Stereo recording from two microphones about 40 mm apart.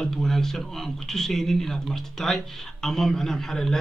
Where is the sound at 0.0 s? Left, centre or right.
Centre.